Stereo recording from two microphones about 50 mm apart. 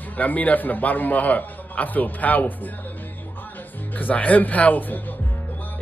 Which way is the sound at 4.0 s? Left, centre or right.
Left.